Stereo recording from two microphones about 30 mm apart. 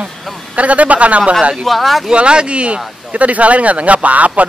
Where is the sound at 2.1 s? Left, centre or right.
Right.